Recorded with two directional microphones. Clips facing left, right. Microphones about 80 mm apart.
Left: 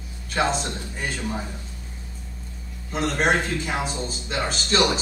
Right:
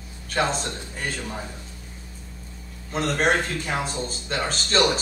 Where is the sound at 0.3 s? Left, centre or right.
Centre.